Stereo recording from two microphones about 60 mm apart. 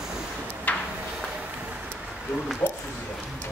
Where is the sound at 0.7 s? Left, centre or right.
Left.